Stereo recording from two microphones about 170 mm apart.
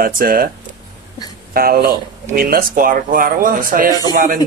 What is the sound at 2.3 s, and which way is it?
Speech, 60° right (ahead or behind).